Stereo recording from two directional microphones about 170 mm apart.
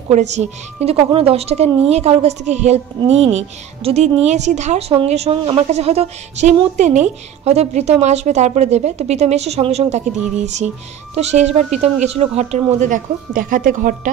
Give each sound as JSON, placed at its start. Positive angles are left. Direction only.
{"t": 0.1, "sound": "a woman's voice", "side_deg": -40}